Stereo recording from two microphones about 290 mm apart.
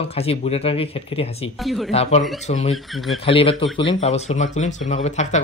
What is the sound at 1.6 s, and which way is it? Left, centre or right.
Speech, centre.